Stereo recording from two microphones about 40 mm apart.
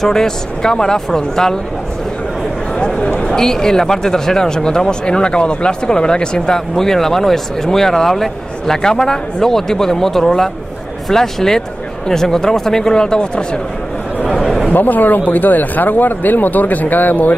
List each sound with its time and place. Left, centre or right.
0.0 s speech: centre
2.8 s speech: left
14.7 s speech: left